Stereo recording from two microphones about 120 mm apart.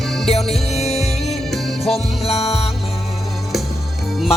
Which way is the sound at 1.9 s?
55° left (ahead or behind).